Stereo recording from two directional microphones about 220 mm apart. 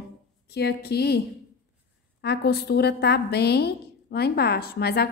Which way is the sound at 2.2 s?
45° left (ahead or behind).